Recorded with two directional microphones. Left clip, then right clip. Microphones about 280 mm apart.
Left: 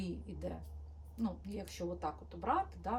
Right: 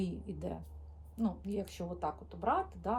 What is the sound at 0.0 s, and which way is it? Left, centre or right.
Speech, centre.